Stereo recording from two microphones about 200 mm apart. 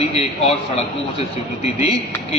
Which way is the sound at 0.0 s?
30° left (ahead or behind).